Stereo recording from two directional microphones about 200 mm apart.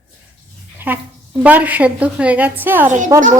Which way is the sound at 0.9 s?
10° right (ahead or behind).